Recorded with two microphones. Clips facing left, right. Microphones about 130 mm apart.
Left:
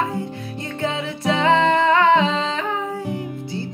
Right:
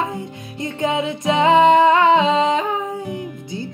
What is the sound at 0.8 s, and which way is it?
Music, 20° right (ahead or behind).